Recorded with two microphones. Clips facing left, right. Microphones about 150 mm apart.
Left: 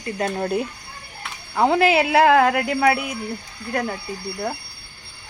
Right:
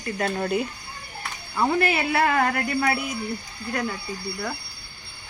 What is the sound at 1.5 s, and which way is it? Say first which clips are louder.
Speech: left 6 dB; 75° left (ahead or behind).